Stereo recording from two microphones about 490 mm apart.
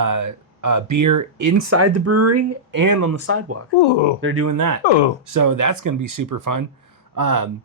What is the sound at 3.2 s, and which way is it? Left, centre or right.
Speech, right.